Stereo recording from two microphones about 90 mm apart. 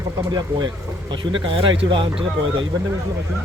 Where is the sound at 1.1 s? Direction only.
65° right (ahead or behind).